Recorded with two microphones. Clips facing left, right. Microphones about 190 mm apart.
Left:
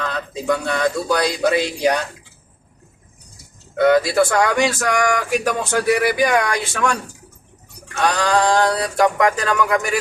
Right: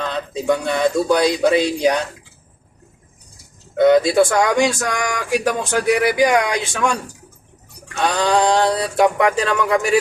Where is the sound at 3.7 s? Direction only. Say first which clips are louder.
Right 2 dB; 20° right (ahead or behind).